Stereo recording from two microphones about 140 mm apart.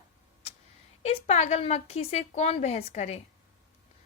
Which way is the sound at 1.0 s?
50° left (ahead or behind).